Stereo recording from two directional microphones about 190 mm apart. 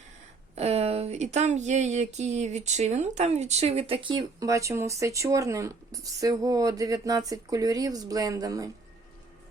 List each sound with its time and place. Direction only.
0.5 s speech: 30° right (ahead or behind)